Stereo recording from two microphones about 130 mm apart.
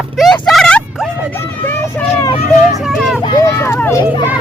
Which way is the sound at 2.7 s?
Centre (ahead or behind).